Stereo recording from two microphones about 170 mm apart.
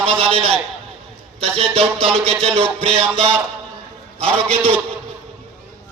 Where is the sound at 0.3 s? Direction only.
35° right (ahead or behind).